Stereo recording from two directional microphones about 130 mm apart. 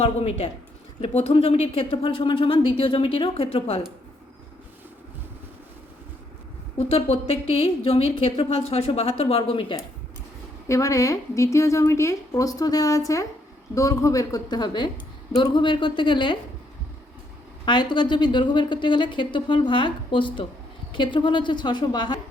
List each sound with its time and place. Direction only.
0.0 s a woman's voice: 55° left (ahead or behind)
6.7 s a woman's voice: 50° left (ahead or behind)
10.7 s a woman's voice: 25° left (ahead or behind)
17.7 s a woman's voice: 35° left (ahead or behind)